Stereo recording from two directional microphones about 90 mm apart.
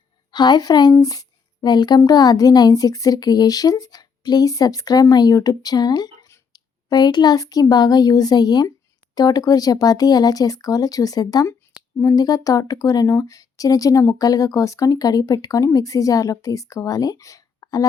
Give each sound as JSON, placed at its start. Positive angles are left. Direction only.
{"t": 0.3, "sound": "a woman's voice", "side_deg": 55}